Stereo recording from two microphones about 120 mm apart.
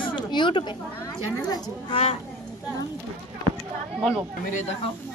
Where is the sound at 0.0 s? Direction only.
40° left (ahead or behind).